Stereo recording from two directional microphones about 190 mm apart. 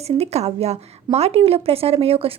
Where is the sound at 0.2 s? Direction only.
35° right (ahead or behind).